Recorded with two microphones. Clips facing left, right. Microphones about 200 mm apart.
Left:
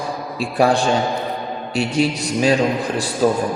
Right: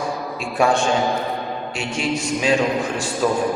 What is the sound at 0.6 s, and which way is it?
A man's voice, 35° left (ahead or behind).